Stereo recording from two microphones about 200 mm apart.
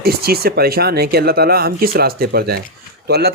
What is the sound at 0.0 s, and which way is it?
Speech, 50° right (ahead or behind).